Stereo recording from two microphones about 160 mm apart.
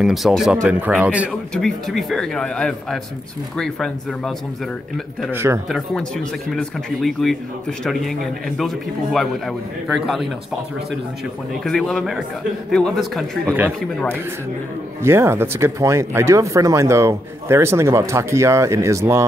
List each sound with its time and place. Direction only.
0.0 s a man's voice: centre (ahead or behind)
5.3 s speech: 15° right (ahead or behind)
5.7 s a man's voice: 5° left (ahead or behind)
11.6 s a man's voice: centre (ahead or behind)
13.5 s speech: 10° right (ahead or behind)
15.0 s speech: 15° right (ahead or behind)